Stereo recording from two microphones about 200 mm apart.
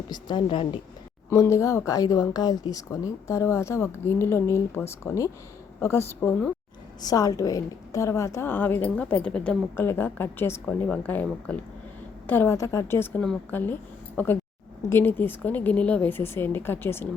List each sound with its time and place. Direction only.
0.1 s a woman's voice: 25° left (ahead or behind)
1.3 s a woman's voice: 15° left (ahead or behind)